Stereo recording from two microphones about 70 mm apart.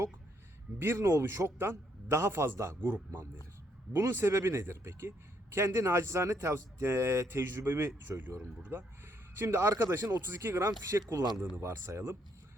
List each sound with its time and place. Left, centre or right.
0.8 s a man's voice: right